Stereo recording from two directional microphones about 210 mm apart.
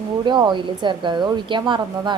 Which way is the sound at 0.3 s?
20° right (ahead or behind).